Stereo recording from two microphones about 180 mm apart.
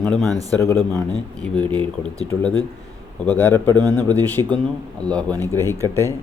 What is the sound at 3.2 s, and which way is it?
Speech, 10° left (ahead or behind).